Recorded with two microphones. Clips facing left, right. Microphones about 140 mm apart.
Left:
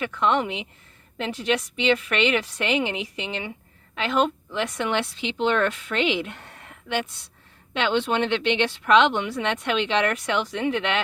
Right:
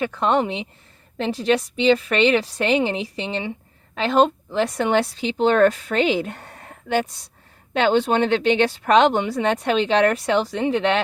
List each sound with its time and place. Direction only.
0.0 s a woman's voice: 35° right (ahead or behind)